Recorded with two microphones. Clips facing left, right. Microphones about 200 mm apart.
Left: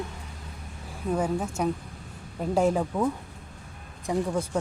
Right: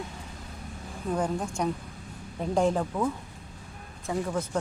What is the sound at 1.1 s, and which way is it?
Speech, 5° left (ahead or behind).